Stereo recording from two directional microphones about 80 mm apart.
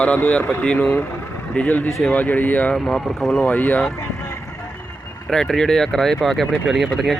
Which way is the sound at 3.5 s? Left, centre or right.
Left.